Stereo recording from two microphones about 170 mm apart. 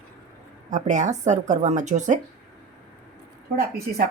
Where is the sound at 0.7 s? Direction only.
45° right (ahead or behind).